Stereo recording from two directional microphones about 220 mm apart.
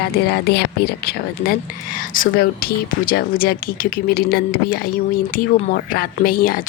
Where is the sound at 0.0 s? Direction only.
45° left (ahead or behind).